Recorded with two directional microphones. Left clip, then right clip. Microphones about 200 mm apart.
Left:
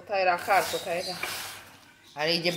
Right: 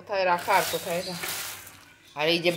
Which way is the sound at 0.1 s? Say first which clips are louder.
Right 1 dB; 10° right (ahead or behind).